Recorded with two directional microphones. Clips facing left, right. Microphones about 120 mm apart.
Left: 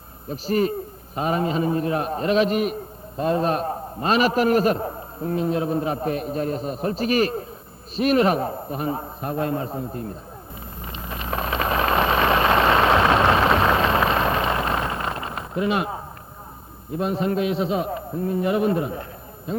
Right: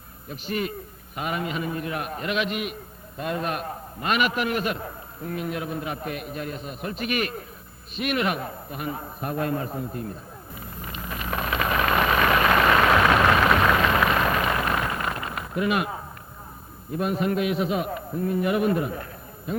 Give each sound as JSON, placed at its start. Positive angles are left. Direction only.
{"t": 0.3, "sound": "a man's voice", "side_deg": 35}
{"t": 10.9, "sound": "vehicle", "side_deg": 30}
{"t": 16.9, "sound": "a man's voice", "side_deg": 25}